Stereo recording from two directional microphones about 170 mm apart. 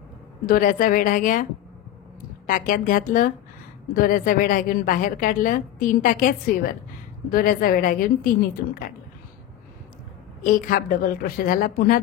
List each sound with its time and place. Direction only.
0.5 s a woman's voice: 55° left (ahead or behind)
10.4 s a woman's voice: 60° left (ahead or behind)